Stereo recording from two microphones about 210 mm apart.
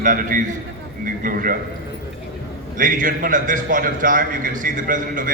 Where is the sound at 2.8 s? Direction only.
40° right (ahead or behind).